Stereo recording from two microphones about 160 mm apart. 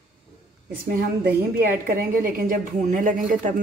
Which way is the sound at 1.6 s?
60° right (ahead or behind).